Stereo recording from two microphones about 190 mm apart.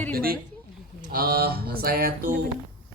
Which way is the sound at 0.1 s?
50° right (ahead or behind).